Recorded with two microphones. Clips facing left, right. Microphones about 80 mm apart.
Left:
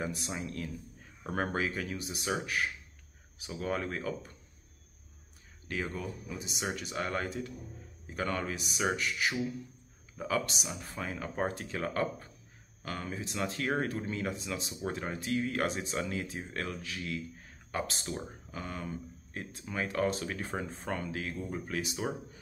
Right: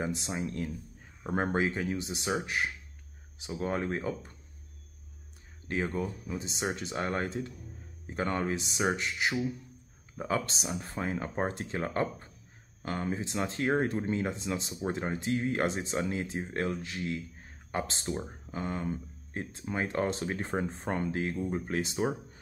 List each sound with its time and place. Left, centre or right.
0.0 s speech: right
5.7 s speech: right